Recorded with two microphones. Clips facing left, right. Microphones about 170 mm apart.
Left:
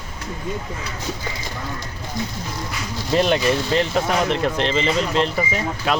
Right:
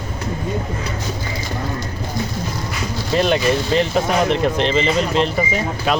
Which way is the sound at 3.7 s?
15° right (ahead or behind).